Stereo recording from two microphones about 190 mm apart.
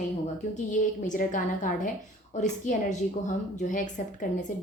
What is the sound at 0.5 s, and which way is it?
A woman's voice, 40° left (ahead or behind).